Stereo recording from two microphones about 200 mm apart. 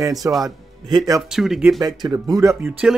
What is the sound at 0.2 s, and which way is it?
Speech, 15° right (ahead or behind).